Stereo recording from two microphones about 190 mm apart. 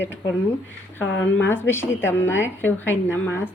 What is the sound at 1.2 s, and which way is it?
A woman's voice, 10° left (ahead or behind).